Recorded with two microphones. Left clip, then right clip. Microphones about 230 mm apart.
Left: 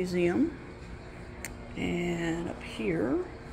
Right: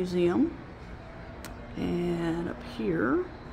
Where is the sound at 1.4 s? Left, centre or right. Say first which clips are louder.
Even; right.